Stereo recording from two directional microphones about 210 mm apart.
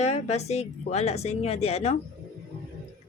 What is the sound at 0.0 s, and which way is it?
A woman's voice, 30° left (ahead or behind).